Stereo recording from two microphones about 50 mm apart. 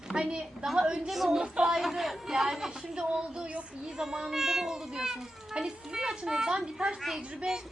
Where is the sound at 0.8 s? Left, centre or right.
Centre.